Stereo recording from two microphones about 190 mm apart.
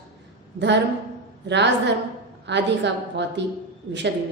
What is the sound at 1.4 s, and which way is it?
A woman's voice, 65° right (ahead or behind).